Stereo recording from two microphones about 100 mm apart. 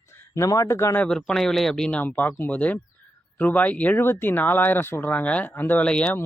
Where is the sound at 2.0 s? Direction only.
20° left (ahead or behind).